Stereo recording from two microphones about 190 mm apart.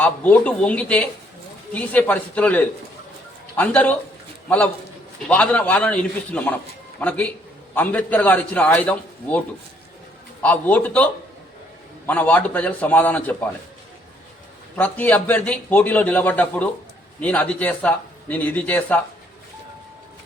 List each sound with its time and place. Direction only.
0.0 s a man's voice: 10° left (ahead or behind)
10.4 s a man's voice: 5° left (ahead or behind)
14.8 s a man's voice: 10° left (ahead or behind)